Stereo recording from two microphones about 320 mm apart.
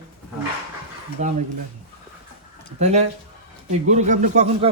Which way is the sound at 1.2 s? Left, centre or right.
Right.